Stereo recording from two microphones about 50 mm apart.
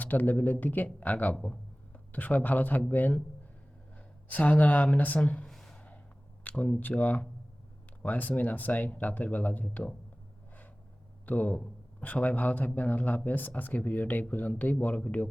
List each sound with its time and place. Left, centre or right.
0.0 s speech: left
2.1 s speech: left
3.9 s speech: left
5.5 s a sound: centre
6.4 s speech: left
11.3 s speech: left